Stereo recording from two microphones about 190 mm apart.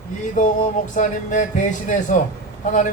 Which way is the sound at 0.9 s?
40° left (ahead or behind).